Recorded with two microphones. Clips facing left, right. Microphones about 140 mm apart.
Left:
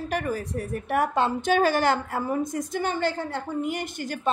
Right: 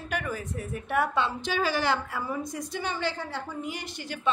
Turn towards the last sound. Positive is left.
turn(degrees=45)  # may be behind; listen again after turning